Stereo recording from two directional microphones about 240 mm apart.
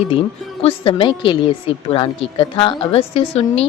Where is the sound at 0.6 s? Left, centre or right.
Left.